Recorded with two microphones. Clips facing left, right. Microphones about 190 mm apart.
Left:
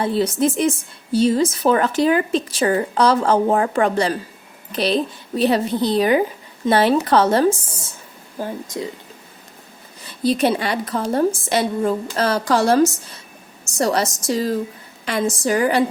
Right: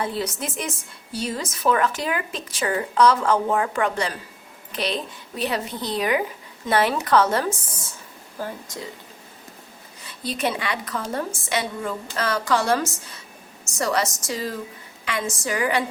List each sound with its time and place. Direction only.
0.0 s speech: 30° left (ahead or behind)
8.4 s speech: 20° left (ahead or behind)
10.1 s speech: 35° left (ahead or behind)